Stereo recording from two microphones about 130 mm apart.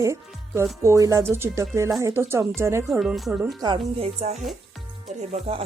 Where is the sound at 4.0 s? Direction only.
55° right (ahead or behind).